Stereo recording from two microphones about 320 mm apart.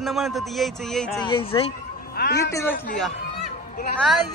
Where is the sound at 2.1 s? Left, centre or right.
Left.